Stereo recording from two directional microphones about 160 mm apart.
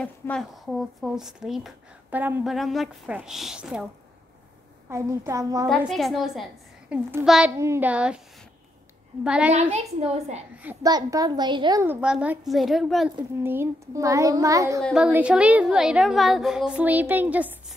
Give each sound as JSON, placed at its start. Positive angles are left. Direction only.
{"t": 0.0, "sound": "a woman's voice", "side_deg": 5}
{"t": 2.5, "sound": "a woman's voice", "side_deg": 0}
{"t": 4.8, "sound": "a child's voice", "side_deg": -15}
{"t": 5.8, "sound": "a woman's voice", "side_deg": 0}
{"t": 6.9, "sound": "child singing", "side_deg": -15}
{"t": 7.2, "sound": "a woman's voice", "side_deg": -5}
{"t": 7.5, "sound": "child singing", "side_deg": -15}
{"t": 9.2, "sound": "a woman's voice", "side_deg": -5}
{"t": 9.5, "sound": "a child's voice", "side_deg": -45}
{"t": 10.8, "sound": "a child's voice", "side_deg": -25}
{"t": 11.8, "sound": "a woman's voice", "side_deg": -10}
{"t": 13.4, "sound": "a child's voice", "side_deg": -15}
{"t": 14.8, "sound": "a woman's voice", "side_deg": 0}